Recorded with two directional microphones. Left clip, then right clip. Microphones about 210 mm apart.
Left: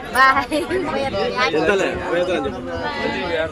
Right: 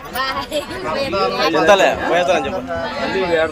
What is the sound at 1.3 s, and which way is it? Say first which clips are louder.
A man's voice: right 6 dB; 5° left (ahead or behind).